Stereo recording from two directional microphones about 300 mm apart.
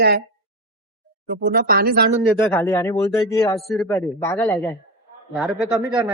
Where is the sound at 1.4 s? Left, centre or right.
Right.